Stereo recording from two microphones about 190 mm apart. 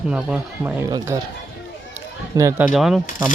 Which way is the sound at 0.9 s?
20° right (ahead or behind).